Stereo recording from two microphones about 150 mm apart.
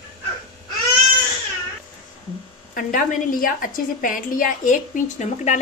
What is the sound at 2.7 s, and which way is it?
A woman's voice, 65° left (ahead or behind).